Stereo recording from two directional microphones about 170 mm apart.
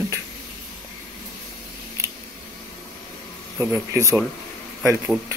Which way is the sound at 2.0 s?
20° right (ahead or behind).